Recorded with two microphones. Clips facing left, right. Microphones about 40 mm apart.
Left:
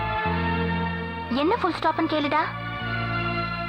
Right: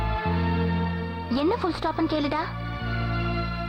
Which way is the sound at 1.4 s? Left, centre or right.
Left.